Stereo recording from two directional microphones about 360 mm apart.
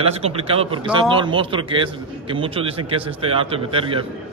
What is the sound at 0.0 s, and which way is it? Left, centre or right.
Speech, centre.